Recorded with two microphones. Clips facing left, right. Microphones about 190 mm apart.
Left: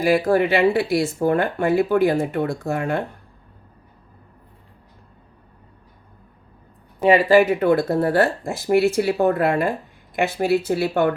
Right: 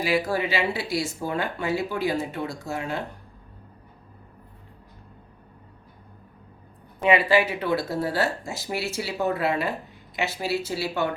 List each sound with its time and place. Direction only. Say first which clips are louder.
0.0 s speech: left 7 dB; 55° left (ahead or behind)
7.0 s speech: left 6 dB; 40° left (ahead or behind)